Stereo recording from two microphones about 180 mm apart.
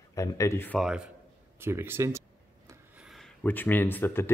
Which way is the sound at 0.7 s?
5° right (ahead or behind).